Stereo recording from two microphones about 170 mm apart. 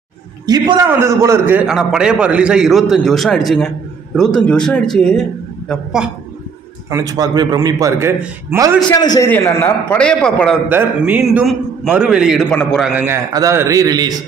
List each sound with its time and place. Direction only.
0.5 s a man's voice: 25° right (ahead or behind); by 6.0 s 5° right (ahead or behind)
6.9 s a man's voice: 20° right (ahead or behind)
8.8 s a man's voice: 25° left (ahead or behind); by 10.6 s 5° left (ahead or behind)
10.7 s a man's voice: 10° right (ahead or behind)
12.9 s a man's voice: 15° right (ahead or behind)